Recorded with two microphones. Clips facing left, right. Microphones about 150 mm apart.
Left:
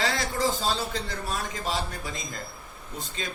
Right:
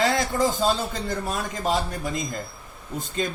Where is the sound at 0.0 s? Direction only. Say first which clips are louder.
Right 5 dB; 50° right (ahead or behind).